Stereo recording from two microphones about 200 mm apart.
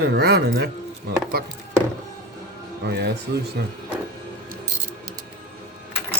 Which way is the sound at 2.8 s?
55° right (ahead or behind).